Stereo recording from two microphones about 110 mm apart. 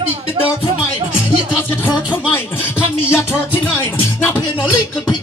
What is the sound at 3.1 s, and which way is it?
Music, 20° left (ahead or behind).